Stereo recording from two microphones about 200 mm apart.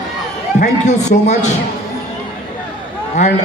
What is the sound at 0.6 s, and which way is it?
Speech, 35° left (ahead or behind).